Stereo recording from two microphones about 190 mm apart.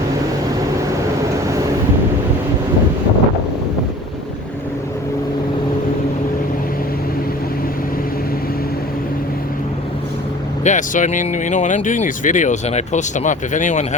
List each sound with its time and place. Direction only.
10.6 s speech: 40° left (ahead or behind)